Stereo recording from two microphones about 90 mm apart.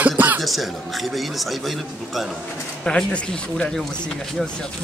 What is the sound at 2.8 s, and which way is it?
Speech, 10° left (ahead or behind).